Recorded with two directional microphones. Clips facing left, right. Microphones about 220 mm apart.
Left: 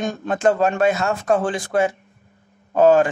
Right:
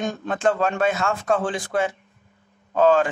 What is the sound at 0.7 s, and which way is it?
Speech, 40° left (ahead or behind).